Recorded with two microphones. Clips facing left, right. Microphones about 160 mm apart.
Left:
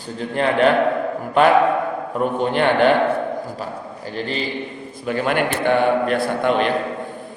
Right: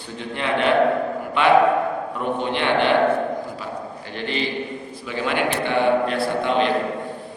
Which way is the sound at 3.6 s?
40° left (ahead or behind).